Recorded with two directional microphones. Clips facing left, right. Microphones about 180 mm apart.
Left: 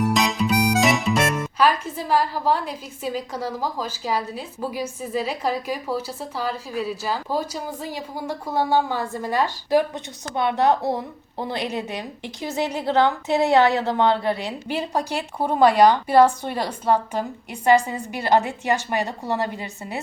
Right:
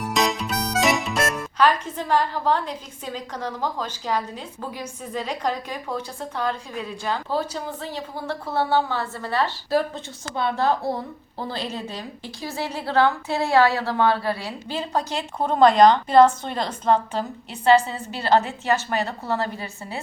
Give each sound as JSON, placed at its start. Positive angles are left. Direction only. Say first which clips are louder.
{"t": 0.0, "sound": "speech", "louder": "left 3 dB", "side_deg": 0}